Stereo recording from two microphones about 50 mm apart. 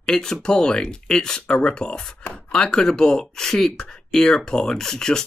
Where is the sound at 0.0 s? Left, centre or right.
Centre.